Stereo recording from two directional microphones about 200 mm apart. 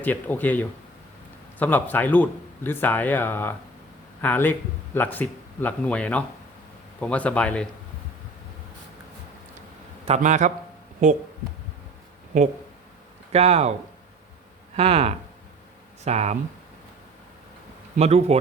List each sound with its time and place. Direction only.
0.0 s speech: 10° left (ahead or behind)
10.1 s speech: 35° right (ahead or behind)
12.3 s speech: 40° right (ahead or behind)
14.8 s speech: 30° right (ahead or behind)
17.9 s speech: 30° right (ahead or behind)